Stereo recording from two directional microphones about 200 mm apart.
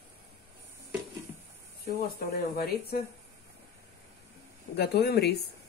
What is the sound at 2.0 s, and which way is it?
Speech, 50° left (ahead or behind).